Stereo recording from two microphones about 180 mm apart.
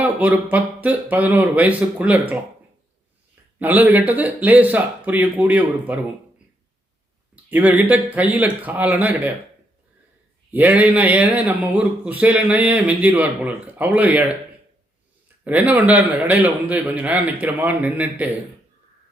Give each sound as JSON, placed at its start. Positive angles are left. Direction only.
{"t": 0.0, "sound": "speech", "side_deg": -10}
{"t": 3.6, "sound": "speech", "side_deg": -10}
{"t": 7.5, "sound": "speech", "side_deg": -10}
{"t": 10.5, "sound": "speech", "side_deg": -10}
{"t": 15.4, "sound": "speech", "side_deg": -10}